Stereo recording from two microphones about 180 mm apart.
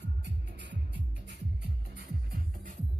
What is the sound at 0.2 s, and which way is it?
Music, 70° right (ahead or behind).